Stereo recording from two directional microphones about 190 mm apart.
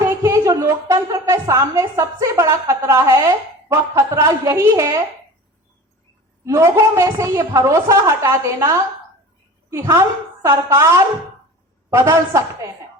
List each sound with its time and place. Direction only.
0.0 s a woman's voice: 15° right (ahead or behind)
6.4 s a woman's voice: 15° right (ahead or behind)